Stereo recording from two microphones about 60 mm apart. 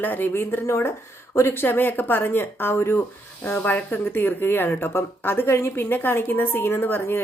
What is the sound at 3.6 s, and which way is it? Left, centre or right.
A woman's voice, left.